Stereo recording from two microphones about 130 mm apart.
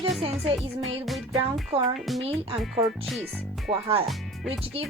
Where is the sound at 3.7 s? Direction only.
45° right (ahead or behind).